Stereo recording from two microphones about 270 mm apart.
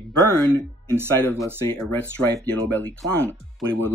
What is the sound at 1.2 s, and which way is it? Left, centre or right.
Speech, centre.